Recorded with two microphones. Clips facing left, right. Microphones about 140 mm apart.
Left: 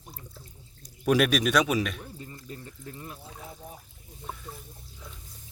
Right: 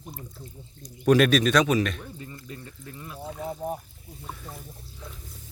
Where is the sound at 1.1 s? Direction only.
5° left (ahead or behind).